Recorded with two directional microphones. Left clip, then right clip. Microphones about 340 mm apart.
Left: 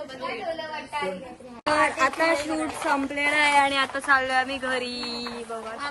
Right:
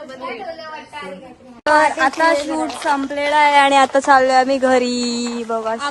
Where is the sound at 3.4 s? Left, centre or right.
Centre.